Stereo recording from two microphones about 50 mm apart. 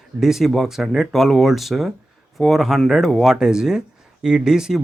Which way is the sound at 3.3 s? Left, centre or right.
Centre.